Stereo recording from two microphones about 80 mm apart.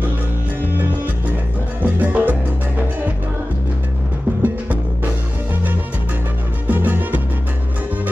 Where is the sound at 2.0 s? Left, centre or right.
Centre.